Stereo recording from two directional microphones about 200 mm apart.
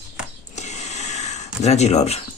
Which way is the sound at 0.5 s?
35° left (ahead or behind).